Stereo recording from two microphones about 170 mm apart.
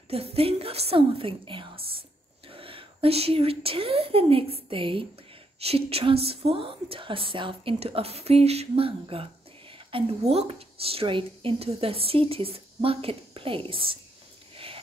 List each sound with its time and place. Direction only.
0.1 s a woman's voice: 35° right (ahead or behind)